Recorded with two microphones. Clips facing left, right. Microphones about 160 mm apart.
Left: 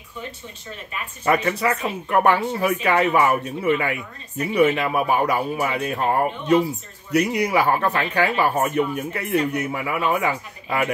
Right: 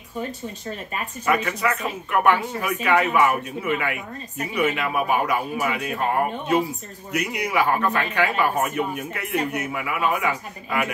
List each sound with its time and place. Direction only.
0.2 s speech: 45° right (ahead or behind)
1.2 s speech: 35° left (ahead or behind)
7.1 s speech: 35° left (ahead or behind)